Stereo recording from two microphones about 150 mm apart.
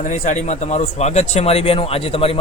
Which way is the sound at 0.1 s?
55° left (ahead or behind).